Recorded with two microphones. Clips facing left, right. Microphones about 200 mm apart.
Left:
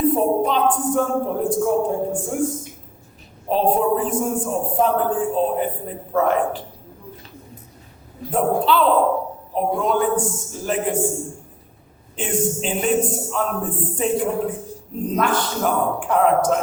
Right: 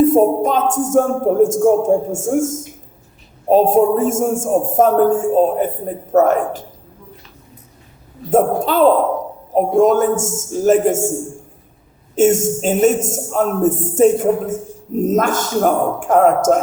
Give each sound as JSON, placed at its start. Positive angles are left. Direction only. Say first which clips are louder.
{"t": 0.0, "sound": "a man's voice", "louder": "right 6 dB", "side_deg": -45}
{"t": 8.3, "sound": "a man's voice", "louder": "right 4 dB", "side_deg": -45}
{"t": 12.1, "sound": "a man's voice", "louder": "right 9 dB", "side_deg": -45}